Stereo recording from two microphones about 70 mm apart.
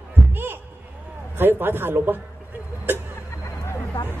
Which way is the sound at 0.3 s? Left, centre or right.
Right.